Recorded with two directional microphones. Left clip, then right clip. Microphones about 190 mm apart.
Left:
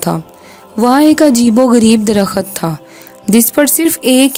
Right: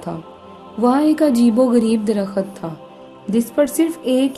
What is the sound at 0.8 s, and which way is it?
A woman's voice, 50° left (ahead or behind).